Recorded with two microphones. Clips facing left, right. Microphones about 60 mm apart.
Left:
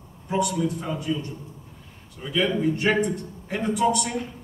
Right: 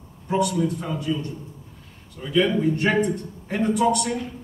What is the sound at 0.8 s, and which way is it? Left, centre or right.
Speech, left.